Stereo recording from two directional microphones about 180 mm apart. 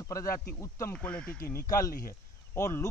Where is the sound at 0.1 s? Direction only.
15° left (ahead or behind).